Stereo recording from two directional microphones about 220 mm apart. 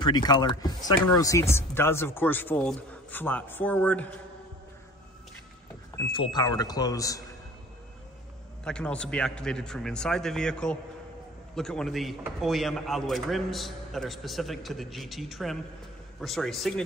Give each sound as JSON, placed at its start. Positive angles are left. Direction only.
{"t": 0.0, "sound": "speech", "side_deg": 20}
{"t": 6.1, "sound": "speech", "side_deg": 20}
{"t": 8.6, "sound": "a man's voice", "side_deg": 5}